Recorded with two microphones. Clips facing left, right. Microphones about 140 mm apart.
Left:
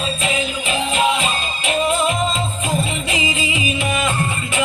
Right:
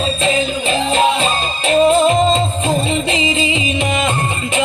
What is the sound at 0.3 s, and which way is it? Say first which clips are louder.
Music: right 6 dB; 30° right (ahead or behind).